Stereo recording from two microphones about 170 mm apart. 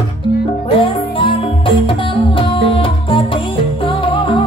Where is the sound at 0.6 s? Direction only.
30° left (ahead or behind).